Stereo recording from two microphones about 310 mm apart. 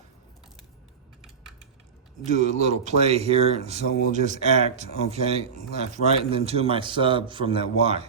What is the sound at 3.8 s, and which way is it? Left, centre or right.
Speech, left.